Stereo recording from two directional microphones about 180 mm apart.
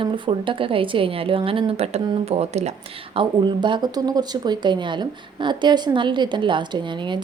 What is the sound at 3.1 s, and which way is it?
Speech, 25° right (ahead or behind).